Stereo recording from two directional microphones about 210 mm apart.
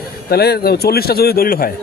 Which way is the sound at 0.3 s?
50° left (ahead or behind).